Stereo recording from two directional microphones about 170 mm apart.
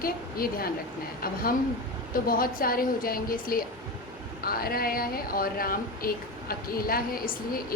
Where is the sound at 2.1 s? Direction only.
60° left (ahead or behind).